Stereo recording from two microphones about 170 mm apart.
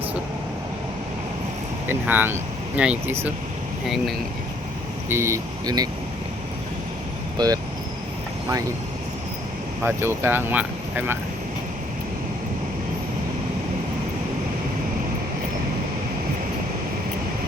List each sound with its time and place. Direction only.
1.9 s speech: 10° right (ahead or behind)
5.0 s speech: 15° right (ahead or behind)
7.3 s speech: 20° right (ahead or behind)
9.8 s speech: 15° right (ahead or behind)